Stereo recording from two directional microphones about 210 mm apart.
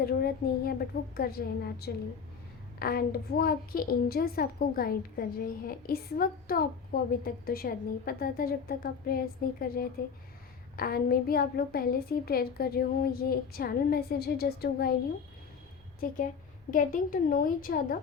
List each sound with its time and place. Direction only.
0.0 s a child's voice: 45° left (ahead or behind)
16.0 s a woman's voice: 40° left (ahead or behind)